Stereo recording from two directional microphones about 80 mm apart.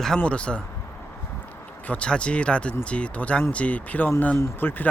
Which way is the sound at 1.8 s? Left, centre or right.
Centre.